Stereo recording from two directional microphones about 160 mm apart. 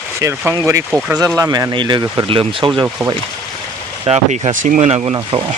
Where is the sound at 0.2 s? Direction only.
20° right (ahead or behind).